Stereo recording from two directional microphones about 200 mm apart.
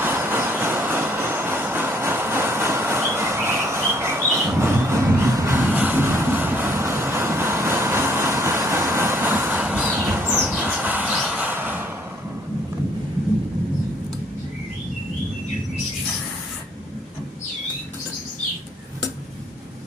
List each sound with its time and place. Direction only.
0.0 s vehicle: 10° right (ahead or behind)